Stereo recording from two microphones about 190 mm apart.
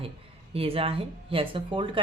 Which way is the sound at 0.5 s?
30° right (ahead or behind).